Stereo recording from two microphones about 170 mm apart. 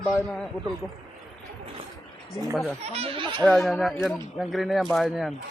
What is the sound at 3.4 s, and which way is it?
Speech, 5° left (ahead or behind).